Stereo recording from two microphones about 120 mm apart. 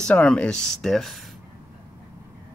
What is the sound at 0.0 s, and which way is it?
Speech, 10° left (ahead or behind).